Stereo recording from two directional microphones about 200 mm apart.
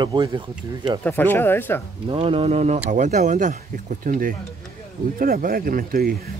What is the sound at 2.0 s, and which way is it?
Speech, 25° right (ahead or behind).